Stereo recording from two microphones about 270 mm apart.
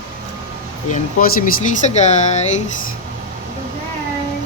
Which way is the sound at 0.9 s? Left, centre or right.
Left.